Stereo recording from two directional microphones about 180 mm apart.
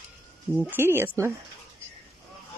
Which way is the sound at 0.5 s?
10° right (ahead or behind).